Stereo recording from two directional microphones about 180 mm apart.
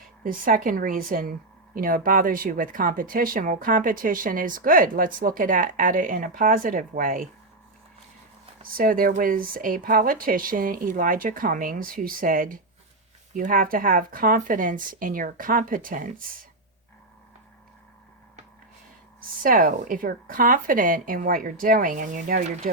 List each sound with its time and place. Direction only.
0.3 s a woman's voice: 50° right (ahead or behind)
8.7 s a woman's voice: 50° right (ahead or behind)
19.2 s a woman's voice: 50° right (ahead or behind)